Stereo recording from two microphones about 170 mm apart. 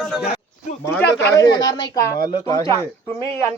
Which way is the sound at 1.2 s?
20° left (ahead or behind).